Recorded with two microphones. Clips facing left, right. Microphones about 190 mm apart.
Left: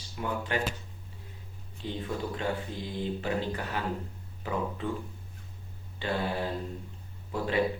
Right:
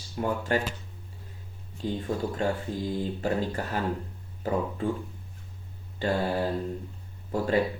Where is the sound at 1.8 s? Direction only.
40° right (ahead or behind).